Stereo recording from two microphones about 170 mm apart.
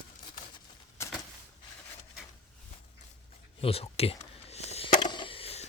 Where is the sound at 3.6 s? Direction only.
35° left (ahead or behind).